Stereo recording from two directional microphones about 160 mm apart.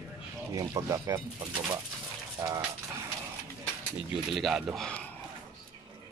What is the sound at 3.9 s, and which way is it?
Speech, centre (ahead or behind).